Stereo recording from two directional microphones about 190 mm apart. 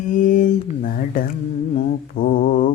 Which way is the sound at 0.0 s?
40° left (ahead or behind).